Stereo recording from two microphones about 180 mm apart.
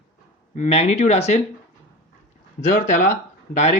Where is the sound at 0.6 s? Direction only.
40° left (ahead or behind).